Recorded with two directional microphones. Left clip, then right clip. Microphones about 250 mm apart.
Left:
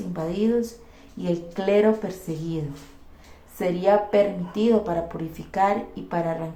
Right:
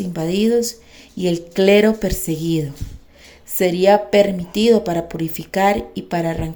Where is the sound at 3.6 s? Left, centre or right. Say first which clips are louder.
Right 6 dB; right.